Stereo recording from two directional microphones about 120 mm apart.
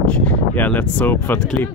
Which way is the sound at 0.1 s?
10° left (ahead or behind).